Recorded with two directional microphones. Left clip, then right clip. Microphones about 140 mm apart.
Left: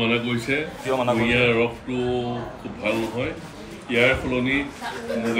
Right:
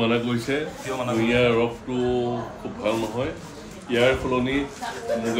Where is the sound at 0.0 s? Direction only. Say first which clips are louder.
Even; 25° right (ahead or behind).